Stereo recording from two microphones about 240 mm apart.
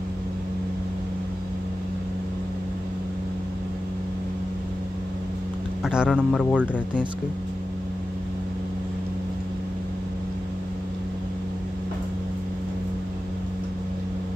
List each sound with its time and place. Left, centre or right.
5.9 s speech: centre